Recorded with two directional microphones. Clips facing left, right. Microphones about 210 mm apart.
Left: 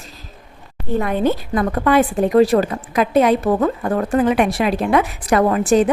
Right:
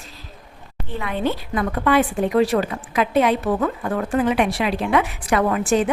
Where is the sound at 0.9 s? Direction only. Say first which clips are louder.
Left 6 dB; 45° left (ahead or behind).